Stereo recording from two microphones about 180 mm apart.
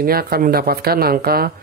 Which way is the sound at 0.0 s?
55° right (ahead or behind).